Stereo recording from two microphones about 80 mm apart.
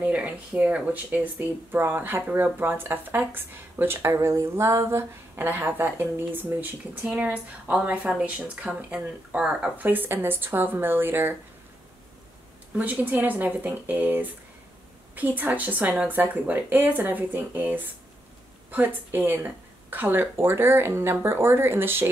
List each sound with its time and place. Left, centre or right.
0.0 s speech: centre
9.8 s speech: right
12.7 s speech: centre